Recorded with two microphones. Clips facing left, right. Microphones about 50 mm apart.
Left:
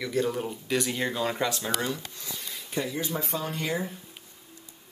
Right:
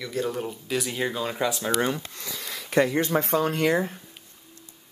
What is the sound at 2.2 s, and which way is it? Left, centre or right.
Speech, right.